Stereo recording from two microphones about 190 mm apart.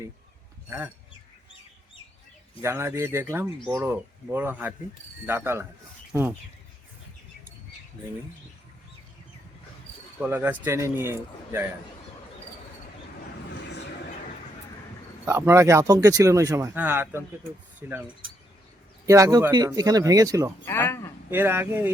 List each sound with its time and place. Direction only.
2.6 s speech: 15° right (ahead or behind)
10.2 s speech: 10° right (ahead or behind)
15.2 s speech: 15° right (ahead or behind)
19.0 s speech: 15° right (ahead or behind)
20.7 s speech: 15° left (ahead or behind)
21.2 s speech: 10° right (ahead or behind)